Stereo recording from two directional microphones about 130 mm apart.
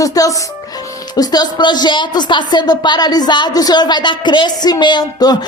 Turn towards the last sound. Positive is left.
turn(degrees=30)  # may be behind; listen again after turning